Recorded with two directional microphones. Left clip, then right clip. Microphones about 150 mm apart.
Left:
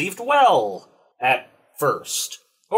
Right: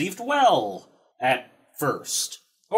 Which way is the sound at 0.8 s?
30° right (ahead or behind).